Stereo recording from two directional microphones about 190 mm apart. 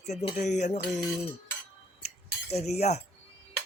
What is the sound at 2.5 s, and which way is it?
Speech, 35° left (ahead or behind).